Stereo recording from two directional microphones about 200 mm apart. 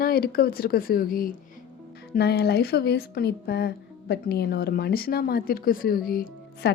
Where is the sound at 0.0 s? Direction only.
50° left (ahead or behind).